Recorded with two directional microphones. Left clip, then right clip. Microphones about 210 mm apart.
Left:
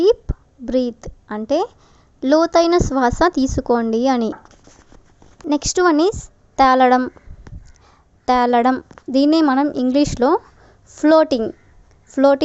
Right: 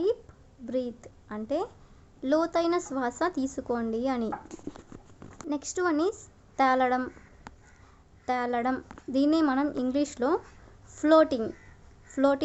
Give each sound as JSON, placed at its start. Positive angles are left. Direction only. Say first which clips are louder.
{"t": 0.0, "sound": "a sound", "louder": "left 13 dB", "side_deg": 45}
{"t": 2.2, "sound": "a woman's voice", "louder": "left 12 dB", "side_deg": 40}
{"t": 5.5, "sound": "a woman's voice", "louder": "left 13 dB", "side_deg": 45}
{"t": 8.2, "sound": "a woman's voice", "louder": "left 14 dB", "side_deg": 40}